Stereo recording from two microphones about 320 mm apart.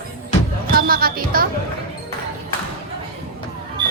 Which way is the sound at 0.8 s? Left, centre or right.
Right.